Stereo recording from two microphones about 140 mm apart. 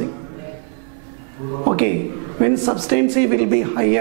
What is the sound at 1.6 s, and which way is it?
A man's voice, 5° right (ahead or behind).